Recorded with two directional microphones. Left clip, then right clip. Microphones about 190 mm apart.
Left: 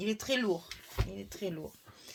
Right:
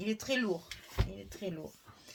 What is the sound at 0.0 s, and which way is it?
Speech, 40° left (ahead or behind).